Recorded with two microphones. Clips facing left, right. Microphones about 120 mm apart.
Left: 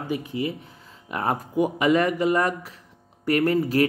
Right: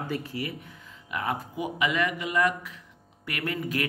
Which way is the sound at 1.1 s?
40° left (ahead or behind).